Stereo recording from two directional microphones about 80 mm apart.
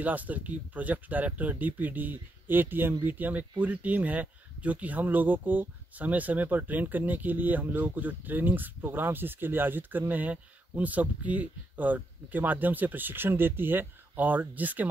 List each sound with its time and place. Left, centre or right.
0.0 s speech: right